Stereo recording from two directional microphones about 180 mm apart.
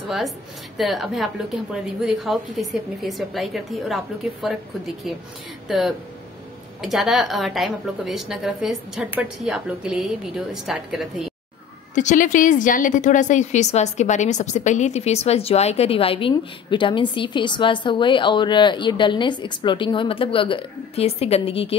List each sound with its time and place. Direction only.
0.7 s a woman's voice: centre (ahead or behind)
11.9 s a woman's voice: 45° left (ahead or behind)